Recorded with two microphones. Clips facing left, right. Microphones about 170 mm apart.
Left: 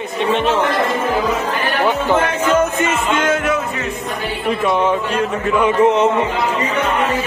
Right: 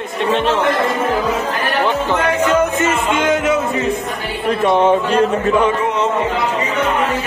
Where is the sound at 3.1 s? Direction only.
15° right (ahead or behind).